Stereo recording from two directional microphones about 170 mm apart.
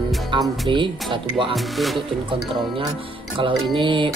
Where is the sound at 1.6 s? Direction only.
Centre (ahead or behind).